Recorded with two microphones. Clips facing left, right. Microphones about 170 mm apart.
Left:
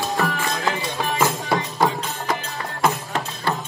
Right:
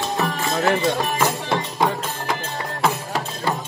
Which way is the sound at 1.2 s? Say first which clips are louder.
Even; 5° left (ahead or behind).